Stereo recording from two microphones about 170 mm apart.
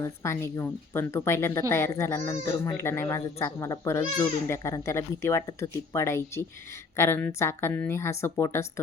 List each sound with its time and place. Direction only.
0.0 s speech: 15° left (ahead or behind)